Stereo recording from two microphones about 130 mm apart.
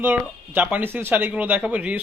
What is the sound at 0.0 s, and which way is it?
Speech, 15° right (ahead or behind).